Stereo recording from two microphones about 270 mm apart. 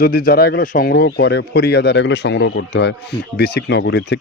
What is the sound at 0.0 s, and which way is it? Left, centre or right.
A man's voice, left.